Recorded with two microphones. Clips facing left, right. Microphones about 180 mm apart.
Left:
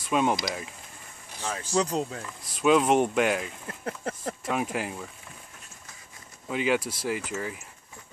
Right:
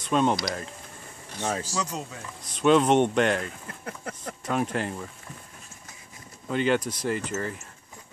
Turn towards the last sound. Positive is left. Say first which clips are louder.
# right 2 dB
turn(degrees=5)  # may be behind; listen again after turning